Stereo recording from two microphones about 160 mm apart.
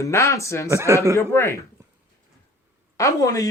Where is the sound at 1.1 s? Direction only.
15° left (ahead or behind).